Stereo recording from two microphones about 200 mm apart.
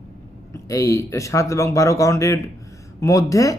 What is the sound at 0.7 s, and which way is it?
Speech, 15° left (ahead or behind).